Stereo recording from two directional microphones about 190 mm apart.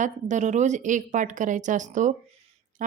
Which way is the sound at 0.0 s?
40° right (ahead or behind).